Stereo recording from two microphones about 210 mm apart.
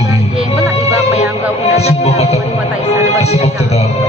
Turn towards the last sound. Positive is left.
turn(degrees=30)  # may be behind; listen again after turning